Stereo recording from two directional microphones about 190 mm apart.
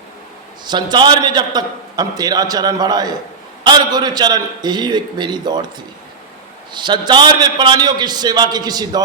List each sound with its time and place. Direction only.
0.6 s a man's voice: 25° right (ahead or behind)
6.7 s a man's voice: 25° right (ahead or behind)